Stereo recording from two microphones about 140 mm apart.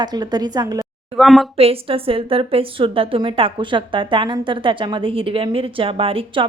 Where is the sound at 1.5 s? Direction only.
45° right (ahead or behind).